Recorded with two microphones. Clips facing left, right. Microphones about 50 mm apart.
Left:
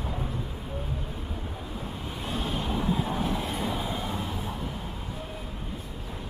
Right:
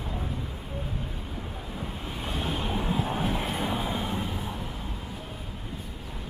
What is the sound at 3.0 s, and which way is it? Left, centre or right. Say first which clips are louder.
Train: even; right.